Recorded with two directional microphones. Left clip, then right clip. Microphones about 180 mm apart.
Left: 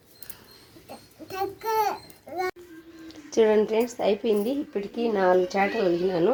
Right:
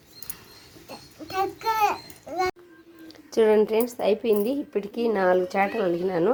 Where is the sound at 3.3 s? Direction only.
Centre (ahead or behind).